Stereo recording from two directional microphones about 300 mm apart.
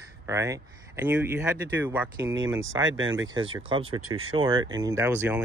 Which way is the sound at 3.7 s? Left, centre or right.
Centre.